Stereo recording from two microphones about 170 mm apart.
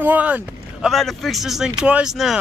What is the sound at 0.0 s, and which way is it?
Speech, 10° right (ahead or behind).